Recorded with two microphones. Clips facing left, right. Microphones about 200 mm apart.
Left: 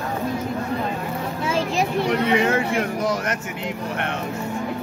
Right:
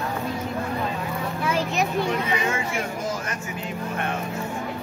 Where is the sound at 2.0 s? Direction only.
70° left (ahead or behind).